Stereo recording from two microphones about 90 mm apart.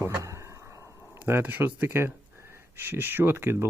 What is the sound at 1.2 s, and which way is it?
Speech, 20° right (ahead or behind).